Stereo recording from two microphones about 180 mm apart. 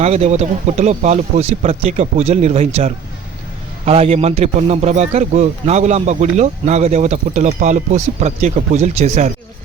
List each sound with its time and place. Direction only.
0.0 s a man's voice: 35° right (ahead or behind)